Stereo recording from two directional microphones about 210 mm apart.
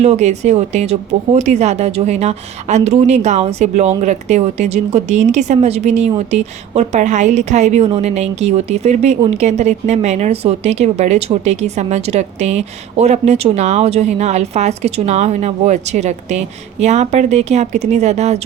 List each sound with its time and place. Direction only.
0.0 s a woman's voice: 30° right (ahead or behind)